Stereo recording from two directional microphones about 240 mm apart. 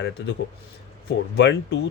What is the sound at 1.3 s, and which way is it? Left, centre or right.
Speech, left.